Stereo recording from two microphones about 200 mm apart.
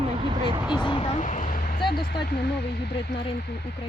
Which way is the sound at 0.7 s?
25° left (ahead or behind).